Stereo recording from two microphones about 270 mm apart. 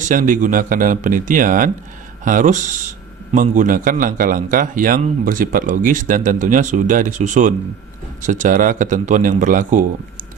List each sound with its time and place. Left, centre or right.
0.1 s speech: right